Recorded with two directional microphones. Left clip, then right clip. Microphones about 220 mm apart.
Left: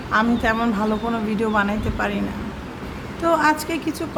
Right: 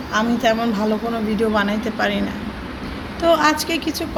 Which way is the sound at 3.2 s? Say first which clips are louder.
Right 2 dB; 10° left (ahead or behind).